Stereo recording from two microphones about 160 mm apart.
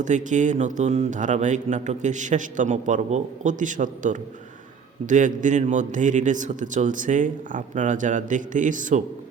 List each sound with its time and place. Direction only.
0.0 s speech: 50° right (ahead or behind)